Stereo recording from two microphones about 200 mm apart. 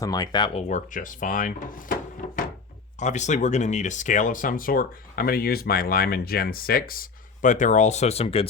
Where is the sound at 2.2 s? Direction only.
45° left (ahead or behind).